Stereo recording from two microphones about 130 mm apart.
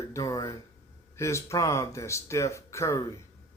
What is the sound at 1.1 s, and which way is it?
Speech, 20° left (ahead or behind).